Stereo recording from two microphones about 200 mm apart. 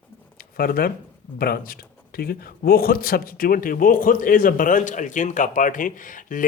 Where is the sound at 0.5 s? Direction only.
45° left (ahead or behind).